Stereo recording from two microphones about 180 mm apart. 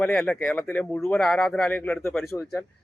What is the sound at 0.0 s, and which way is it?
A man's voice, 5° left (ahead or behind).